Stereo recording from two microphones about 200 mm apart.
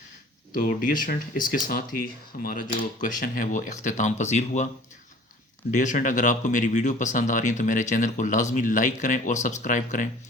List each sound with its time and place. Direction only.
0.5 s speech: 45° left (ahead or behind)
5.7 s speech: 40° left (ahead or behind)